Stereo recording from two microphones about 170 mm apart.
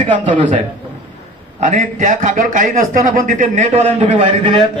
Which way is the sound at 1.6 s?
45° right (ahead or behind).